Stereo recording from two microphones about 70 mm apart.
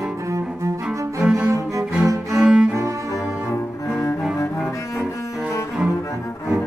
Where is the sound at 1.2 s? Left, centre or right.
Centre.